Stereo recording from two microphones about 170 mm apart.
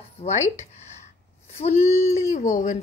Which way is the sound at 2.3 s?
45° left (ahead or behind).